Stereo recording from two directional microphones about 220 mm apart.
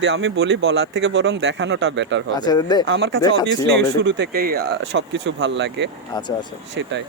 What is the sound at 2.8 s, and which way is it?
Speech, 55° right (ahead or behind).